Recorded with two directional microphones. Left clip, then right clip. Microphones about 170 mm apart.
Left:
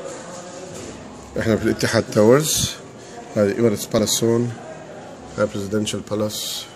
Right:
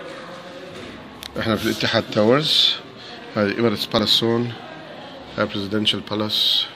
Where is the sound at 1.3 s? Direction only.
15° left (ahead or behind).